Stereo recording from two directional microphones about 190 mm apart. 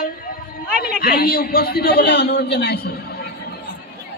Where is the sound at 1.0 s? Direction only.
50° left (ahead or behind).